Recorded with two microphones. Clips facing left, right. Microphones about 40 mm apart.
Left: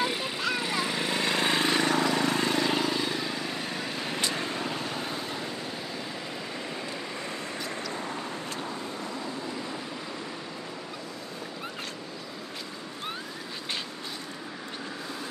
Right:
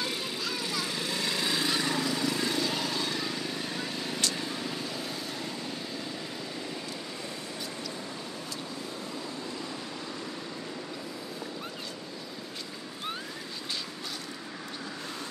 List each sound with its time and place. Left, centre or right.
0.0 s vehicle: left
0.4 s vehicle: left
2.8 s vehicle: centre; by 5.1 s left